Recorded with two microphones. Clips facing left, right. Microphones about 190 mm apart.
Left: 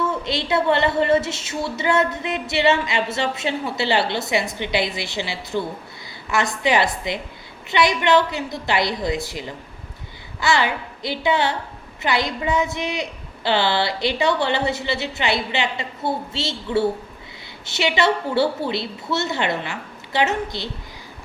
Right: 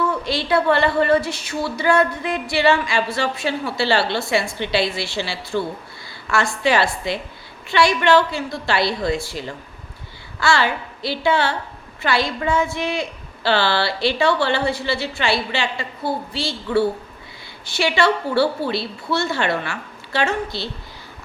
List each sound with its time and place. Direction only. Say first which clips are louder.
0.0 s a woman's voice: right 2 dB; 20° left (ahead or behind)